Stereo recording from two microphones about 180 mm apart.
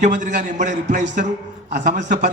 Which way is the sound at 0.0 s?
45° right (ahead or behind).